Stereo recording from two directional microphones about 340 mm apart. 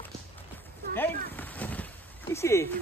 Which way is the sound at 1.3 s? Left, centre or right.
Centre.